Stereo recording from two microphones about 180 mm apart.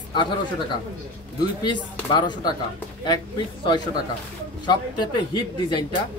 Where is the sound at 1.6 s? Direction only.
25° left (ahead or behind).